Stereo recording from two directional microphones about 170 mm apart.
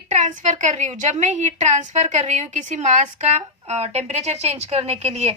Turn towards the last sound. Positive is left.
turn(degrees=-40)  # may be behind; listen again after turning